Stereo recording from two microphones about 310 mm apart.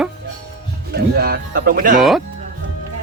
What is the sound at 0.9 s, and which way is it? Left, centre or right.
Speech, right.